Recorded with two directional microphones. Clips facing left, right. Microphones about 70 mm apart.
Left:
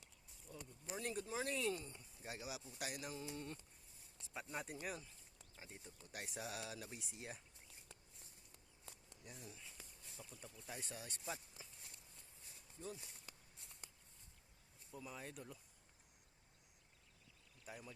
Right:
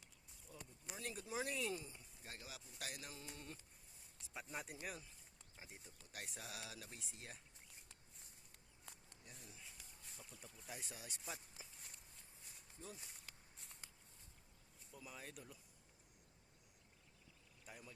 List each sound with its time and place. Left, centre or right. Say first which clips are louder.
0.4 s a sound: left 4 dB; centre
1.4 s speech: left 1 dB; centre
2.2 s speech: left 7 dB; centre
5.5 s speech: left 2 dB; centre
5.8 s speech: left 3 dB; centre
9.2 s speech: left 4 dB; centre
11.6 s a sound: even; centre
14.9 s speech: left 4 dB; centre
17.7 s speech: left 4 dB; centre